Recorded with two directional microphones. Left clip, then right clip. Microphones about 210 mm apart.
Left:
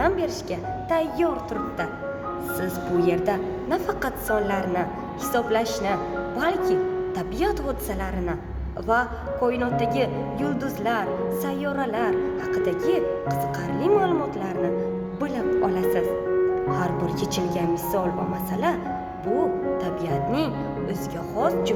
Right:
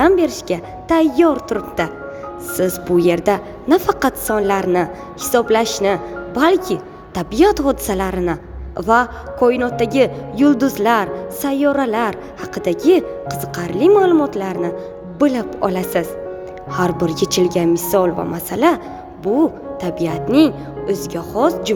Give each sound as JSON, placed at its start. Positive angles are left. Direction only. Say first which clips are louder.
{"t": 0.0, "sound": "speech", "louder": "right 9 dB", "side_deg": -45}
{"t": 19.8, "sound": "speech", "louder": "right 5 dB", "side_deg": -45}